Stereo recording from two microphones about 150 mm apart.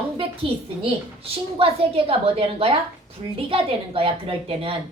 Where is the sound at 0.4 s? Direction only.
40° right (ahead or behind).